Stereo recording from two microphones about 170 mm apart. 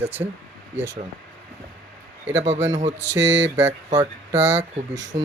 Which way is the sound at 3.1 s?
90° right.